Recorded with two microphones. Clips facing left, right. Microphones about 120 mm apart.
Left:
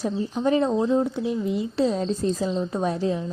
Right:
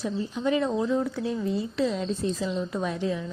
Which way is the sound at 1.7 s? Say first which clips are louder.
Left 4 dB; 35° left (ahead or behind).